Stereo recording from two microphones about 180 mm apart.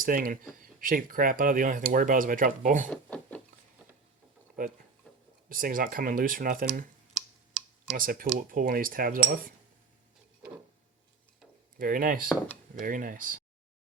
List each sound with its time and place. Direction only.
0.0 s speech: 50° right (ahead or behind)
2.9 s a sound: 5° left (ahead or behind)
5.0 s a sound: 5° left (ahead or behind)
5.5 s speech: 50° right (ahead or behind)
7.1 s clicking: centre (ahead or behind)
7.9 s speech: 50° right (ahead or behind)
11.8 s speech: 50° right (ahead or behind)